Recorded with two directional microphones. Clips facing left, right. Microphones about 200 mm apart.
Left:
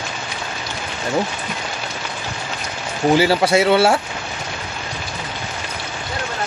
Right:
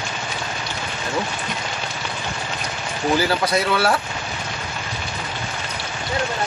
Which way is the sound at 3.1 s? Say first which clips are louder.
Left 5 dB; 30° left (ahead or behind).